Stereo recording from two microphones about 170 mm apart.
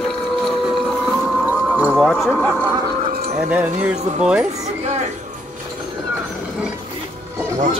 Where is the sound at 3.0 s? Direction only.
55° right (ahead or behind).